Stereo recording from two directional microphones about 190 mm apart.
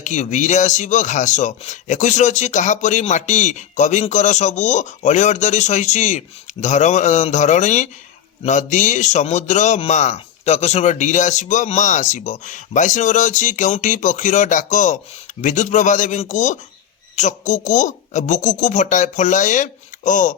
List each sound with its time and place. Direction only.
0.0 s speech: 40° left (ahead or behind)